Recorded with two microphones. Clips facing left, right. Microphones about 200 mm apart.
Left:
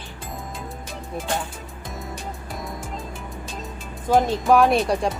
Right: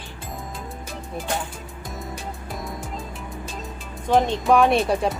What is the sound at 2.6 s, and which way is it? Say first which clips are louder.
Music: even; centre (ahead or behind).